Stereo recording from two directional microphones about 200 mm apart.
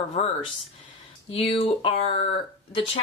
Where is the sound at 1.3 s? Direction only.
30° left (ahead or behind).